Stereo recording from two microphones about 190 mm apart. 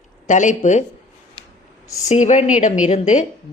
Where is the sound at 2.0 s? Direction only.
35° left (ahead or behind).